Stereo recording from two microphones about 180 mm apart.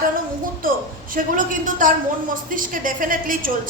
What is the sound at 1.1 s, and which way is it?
A woman's voice, 45° right (ahead or behind).